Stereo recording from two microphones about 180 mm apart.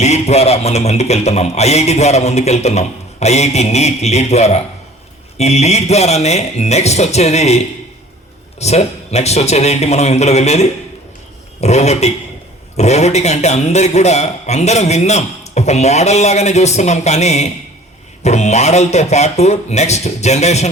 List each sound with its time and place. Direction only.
0.0 s a man's voice: 40° left (ahead or behind)